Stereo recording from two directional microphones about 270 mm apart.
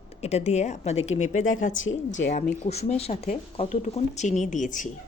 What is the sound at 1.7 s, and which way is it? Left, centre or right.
Speech, left.